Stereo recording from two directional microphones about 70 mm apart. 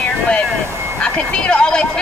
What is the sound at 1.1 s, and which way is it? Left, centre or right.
Speech, centre.